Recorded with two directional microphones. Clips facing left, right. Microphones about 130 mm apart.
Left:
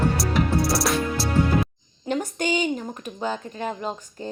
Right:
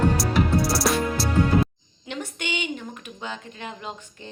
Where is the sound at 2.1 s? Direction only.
40° left (ahead or behind).